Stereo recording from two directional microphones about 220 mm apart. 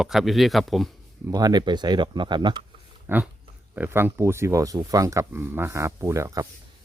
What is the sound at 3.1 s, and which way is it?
Speech, 10° right (ahead or behind).